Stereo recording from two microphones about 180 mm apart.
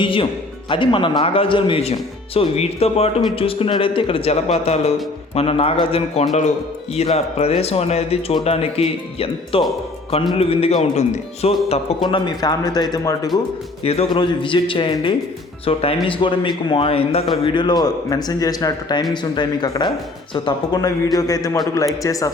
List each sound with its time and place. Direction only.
0.0 s speech: 30° left (ahead or behind)
12.0 s speech: 25° left (ahead or behind)
13.8 s speech: 35° left (ahead or behind); by 22.3 s 20° left (ahead or behind)